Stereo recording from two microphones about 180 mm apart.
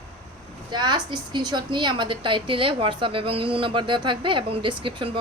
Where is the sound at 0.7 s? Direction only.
25° right (ahead or behind).